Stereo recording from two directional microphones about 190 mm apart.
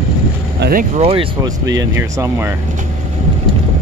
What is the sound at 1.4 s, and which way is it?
Speech, 20° right (ahead or behind).